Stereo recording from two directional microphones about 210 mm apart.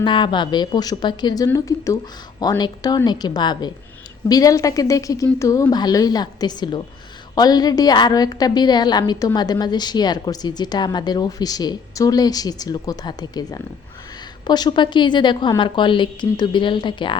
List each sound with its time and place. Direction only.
0.0 s a woman's voice: 20° left (ahead or behind)